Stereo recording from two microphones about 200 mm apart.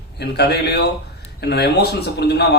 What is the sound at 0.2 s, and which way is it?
Speech, 55° left (ahead or behind).